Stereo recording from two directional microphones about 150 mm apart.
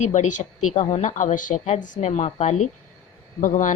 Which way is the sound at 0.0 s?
55° left (ahead or behind).